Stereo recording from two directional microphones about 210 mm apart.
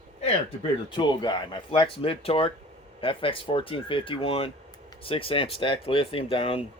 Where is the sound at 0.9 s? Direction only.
20° left (ahead or behind).